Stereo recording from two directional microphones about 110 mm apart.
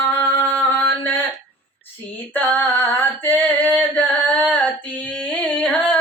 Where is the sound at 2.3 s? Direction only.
15° left (ahead or behind).